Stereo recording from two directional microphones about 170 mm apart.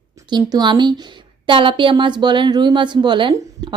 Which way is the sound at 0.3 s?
25° right (ahead or behind).